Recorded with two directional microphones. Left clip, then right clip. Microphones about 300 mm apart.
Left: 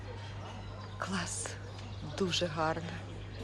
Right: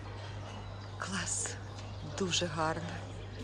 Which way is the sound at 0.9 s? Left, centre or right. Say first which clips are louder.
Even; centre.